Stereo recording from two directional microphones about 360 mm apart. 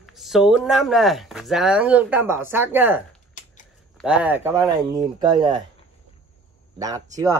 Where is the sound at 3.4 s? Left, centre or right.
Left.